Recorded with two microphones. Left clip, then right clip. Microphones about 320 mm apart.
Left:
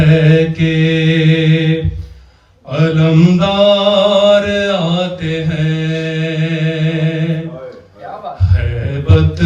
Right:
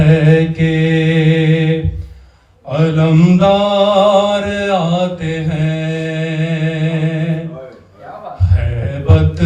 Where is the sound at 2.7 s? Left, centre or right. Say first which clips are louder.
Left 1 dB; centre.